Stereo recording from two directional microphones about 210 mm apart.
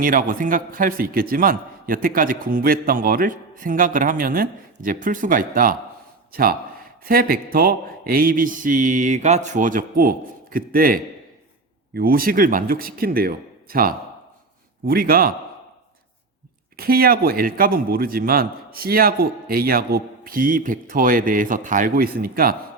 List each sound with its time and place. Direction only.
0.0 s a man's voice: 40° right (ahead or behind)
16.7 s a man's voice: 45° right (ahead or behind)